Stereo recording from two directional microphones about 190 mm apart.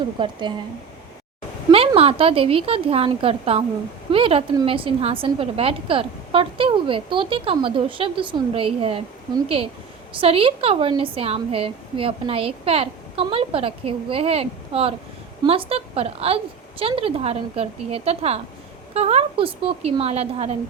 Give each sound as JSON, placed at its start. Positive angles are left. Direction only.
{"t": 0.2, "sound": "a woman's voice", "side_deg": -25}
{"t": 1.7, "sound": "a woman's voice", "side_deg": -30}